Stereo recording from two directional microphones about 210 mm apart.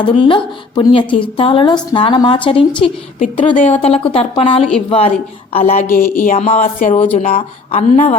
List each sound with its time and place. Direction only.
0.0 s a woman's voice: 25° left (ahead or behind)
3.2 s a woman's voice: 35° left (ahead or behind)
6.0 s speech: 40° left (ahead or behind)